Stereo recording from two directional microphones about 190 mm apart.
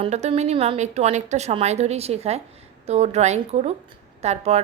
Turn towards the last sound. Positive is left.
turn(degrees=-35)  # may be behind; listen again after turning